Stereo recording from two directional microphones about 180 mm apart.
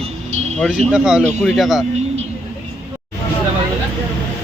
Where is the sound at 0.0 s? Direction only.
35° right (ahead or behind).